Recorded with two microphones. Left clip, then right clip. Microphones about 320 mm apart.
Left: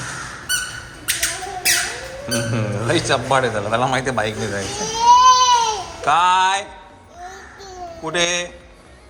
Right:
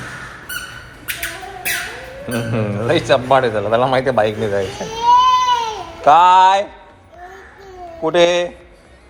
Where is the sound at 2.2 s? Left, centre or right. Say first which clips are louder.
Right 2 dB; centre.